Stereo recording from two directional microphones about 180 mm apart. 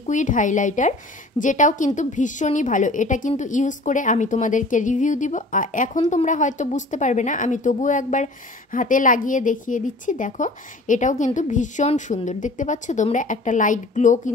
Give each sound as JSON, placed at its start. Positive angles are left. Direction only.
{"t": 0.0, "sound": "a woman's voice", "side_deg": 45}